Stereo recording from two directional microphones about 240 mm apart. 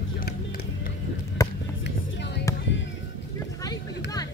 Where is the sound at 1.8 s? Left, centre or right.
Left.